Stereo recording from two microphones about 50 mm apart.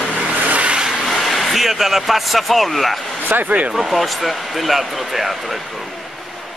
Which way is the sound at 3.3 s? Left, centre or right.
Right.